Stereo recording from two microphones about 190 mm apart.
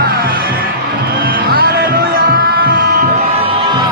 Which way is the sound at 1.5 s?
55° right (ahead or behind).